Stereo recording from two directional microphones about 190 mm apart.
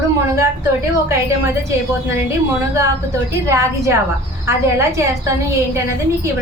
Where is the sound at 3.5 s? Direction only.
15° right (ahead or behind).